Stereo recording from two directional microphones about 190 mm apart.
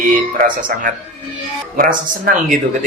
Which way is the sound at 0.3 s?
45° right (ahead or behind).